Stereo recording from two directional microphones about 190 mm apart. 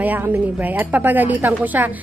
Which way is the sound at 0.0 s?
10° right (ahead or behind).